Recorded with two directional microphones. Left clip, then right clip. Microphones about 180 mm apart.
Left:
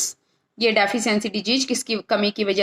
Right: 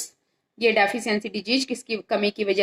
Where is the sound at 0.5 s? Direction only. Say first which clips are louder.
Left 1 dB; 25° left (ahead or behind).